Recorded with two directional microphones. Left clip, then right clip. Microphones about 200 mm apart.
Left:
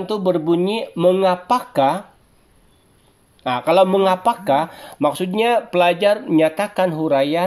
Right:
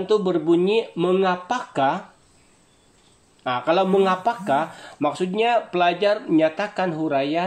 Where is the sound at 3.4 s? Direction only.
45° left (ahead or behind).